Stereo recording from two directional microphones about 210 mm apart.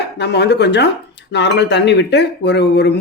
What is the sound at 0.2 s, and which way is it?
Speech, 55° left (ahead or behind).